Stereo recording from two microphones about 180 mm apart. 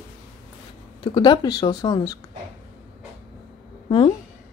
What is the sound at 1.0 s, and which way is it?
Speech, 25° left (ahead or behind).